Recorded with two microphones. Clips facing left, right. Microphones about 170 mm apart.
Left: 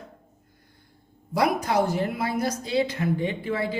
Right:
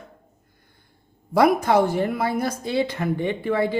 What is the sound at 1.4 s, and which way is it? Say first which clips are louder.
Speech: right 5 dB; 55° right (ahead or behind).